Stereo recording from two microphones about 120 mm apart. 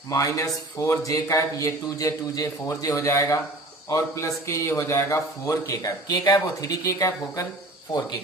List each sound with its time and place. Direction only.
0.1 s speech: 25° left (ahead or behind)